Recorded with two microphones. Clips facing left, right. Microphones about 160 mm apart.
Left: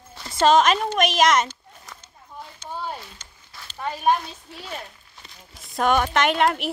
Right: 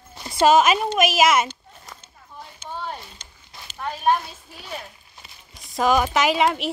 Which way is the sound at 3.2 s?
15° right (ahead or behind).